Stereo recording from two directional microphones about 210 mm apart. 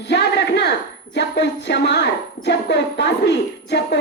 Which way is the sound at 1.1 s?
55° left (ahead or behind).